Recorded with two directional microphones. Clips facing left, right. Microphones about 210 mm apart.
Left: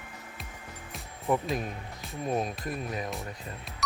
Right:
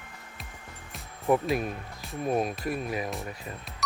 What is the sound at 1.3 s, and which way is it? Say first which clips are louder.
Speech: right 4 dB; 10° right (ahead or behind).